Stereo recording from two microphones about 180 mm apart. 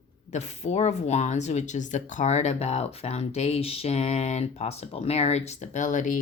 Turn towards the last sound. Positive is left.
turn(degrees=45)  # may be behind; listen again after turning